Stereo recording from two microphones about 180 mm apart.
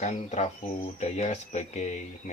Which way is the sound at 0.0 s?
40° left (ahead or behind).